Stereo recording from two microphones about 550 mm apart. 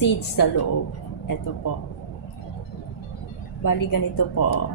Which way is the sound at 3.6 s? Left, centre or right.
Left.